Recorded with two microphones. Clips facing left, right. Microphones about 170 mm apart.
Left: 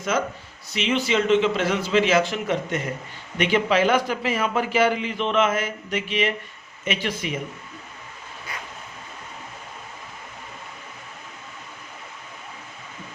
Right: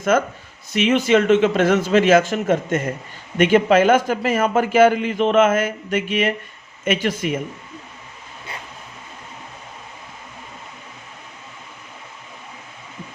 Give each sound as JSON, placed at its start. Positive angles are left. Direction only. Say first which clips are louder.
{"t": 0.7, "sound": "a man's voice", "louder": "right 7 dB", "side_deg": -50}